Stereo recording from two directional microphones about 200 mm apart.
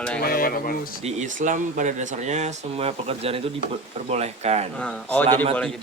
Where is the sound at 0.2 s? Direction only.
45° left (ahead or behind).